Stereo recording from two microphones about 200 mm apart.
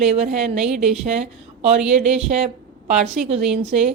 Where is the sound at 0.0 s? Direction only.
35° right (ahead or behind).